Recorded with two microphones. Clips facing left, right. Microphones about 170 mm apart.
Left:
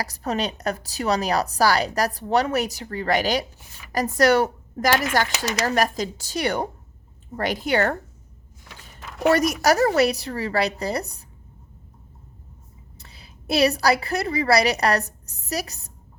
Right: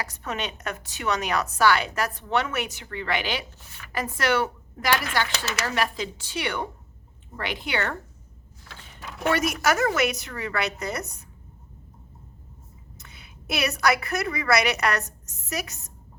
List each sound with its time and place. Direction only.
0.0 s a woman's voice: 35° left (ahead or behind)
9.3 s a woman's voice: 40° left (ahead or behind)
13.0 s a woman's voice: 30° left (ahead or behind)